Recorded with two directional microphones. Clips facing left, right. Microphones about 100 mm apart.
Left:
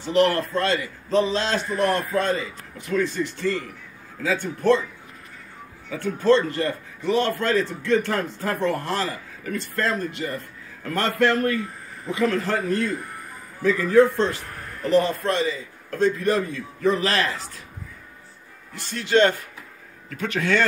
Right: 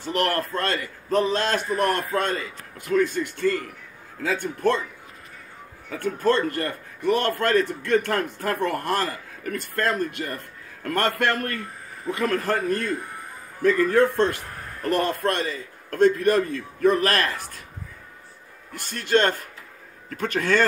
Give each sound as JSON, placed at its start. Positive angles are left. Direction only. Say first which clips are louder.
{"t": 0.1, "sound": "a man's voice", "louder": "left 4 dB", "side_deg": -50}
{"t": 5.9, "sound": "a man's voice", "louder": "left 3 dB", "side_deg": -50}
{"t": 18.8, "sound": "a man's voice", "louder": "left 2 dB", "side_deg": -50}